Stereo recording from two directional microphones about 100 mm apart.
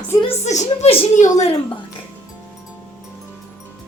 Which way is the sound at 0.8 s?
90° left.